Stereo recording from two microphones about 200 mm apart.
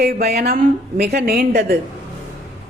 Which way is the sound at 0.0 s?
50° right (ahead or behind).